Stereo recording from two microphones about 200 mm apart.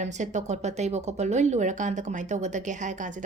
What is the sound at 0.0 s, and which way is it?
Speech, 35° right (ahead or behind).